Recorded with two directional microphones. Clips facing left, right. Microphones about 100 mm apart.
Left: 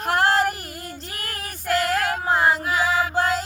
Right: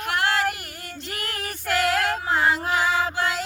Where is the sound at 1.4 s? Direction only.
40° left (ahead or behind).